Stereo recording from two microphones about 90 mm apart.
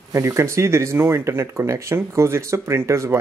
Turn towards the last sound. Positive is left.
turn(degrees=-30)  # may be behind; listen again after turning